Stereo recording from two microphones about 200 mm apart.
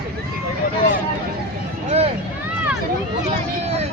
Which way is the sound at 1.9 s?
30° right (ahead or behind).